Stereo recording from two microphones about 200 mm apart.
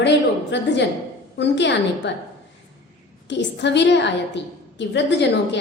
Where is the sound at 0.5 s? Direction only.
60° left (ahead or behind).